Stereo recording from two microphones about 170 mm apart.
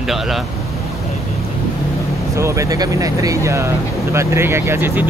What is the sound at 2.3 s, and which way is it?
Speech, 15° right (ahead or behind).